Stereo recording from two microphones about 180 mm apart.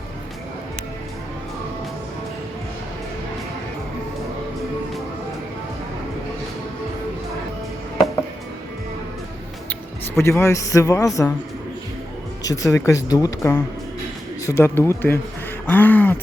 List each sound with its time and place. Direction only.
10.2 s a man's voice: 15° left (ahead or behind)
12.4 s a man's voice: 20° left (ahead or behind)